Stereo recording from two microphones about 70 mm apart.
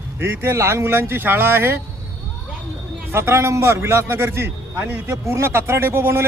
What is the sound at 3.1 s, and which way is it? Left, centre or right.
A man's voice, right.